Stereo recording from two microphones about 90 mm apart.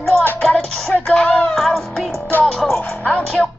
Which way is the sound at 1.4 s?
Centre (ahead or behind).